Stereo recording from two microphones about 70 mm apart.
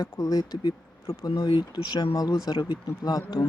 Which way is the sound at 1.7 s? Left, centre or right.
Left.